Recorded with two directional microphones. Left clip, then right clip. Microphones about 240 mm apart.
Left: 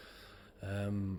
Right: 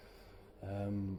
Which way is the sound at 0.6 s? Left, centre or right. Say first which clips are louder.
Left 1 dB; left.